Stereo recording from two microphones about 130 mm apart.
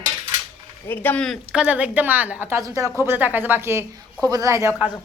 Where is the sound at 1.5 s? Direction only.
10° right (ahead or behind).